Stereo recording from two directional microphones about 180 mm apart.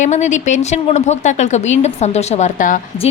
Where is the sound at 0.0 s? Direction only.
40° left (ahead or behind).